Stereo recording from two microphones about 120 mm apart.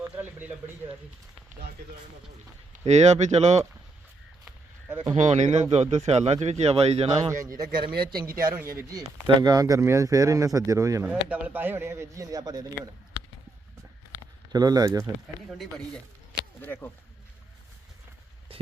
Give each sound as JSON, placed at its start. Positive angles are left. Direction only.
{"t": 0.0, "sound": "a sound", "side_deg": -15}
{"t": 2.8, "sound": "speech", "side_deg": -70}
{"t": 4.4, "sound": "a sound", "side_deg": -20}
{"t": 5.1, "sound": "speech", "side_deg": -75}
{"t": 7.3, "sound": "speech", "side_deg": -25}
{"t": 8.5, "sound": "speech", "side_deg": -20}
{"t": 11.0, "sound": "speech", "side_deg": -10}
{"t": 14.5, "sound": "speech", "side_deg": -35}
{"t": 15.5, "sound": "speech", "side_deg": 0}
{"t": 16.6, "sound": "speech", "side_deg": 15}
{"t": 18.5, "sound": "a sound", "side_deg": -50}